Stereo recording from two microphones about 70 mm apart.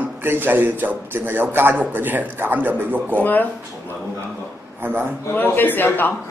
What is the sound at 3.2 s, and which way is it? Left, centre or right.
Speech, left.